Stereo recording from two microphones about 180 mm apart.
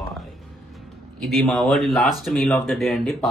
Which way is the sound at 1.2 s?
Centre (ahead or behind).